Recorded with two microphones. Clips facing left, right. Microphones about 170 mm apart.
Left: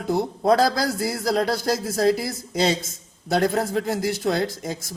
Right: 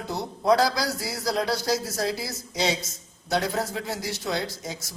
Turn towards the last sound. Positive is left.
turn(degrees=50)  # may be behind; listen again after turning